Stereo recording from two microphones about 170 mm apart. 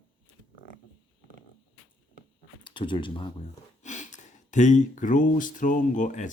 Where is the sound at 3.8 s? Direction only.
45° left (ahead or behind).